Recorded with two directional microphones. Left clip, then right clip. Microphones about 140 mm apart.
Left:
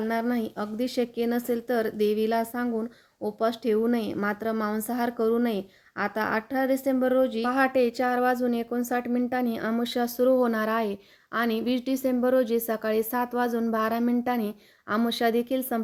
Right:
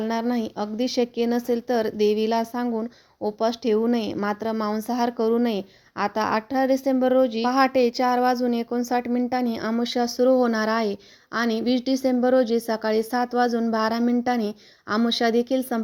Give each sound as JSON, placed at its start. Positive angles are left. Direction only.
{"t": 0.0, "sound": "a woman's voice", "side_deg": -30}